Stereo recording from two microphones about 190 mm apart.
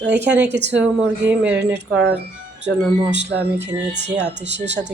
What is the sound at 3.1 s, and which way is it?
Speech, 65° right (ahead or behind).